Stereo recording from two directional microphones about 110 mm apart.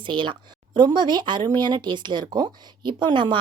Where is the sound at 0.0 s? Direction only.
45° right (ahead or behind).